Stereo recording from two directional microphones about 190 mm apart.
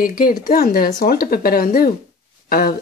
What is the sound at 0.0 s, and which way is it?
Speech, 45° left (ahead or behind).